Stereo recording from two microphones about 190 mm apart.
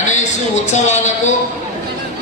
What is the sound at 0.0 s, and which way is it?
A man's voice, 40° left (ahead or behind).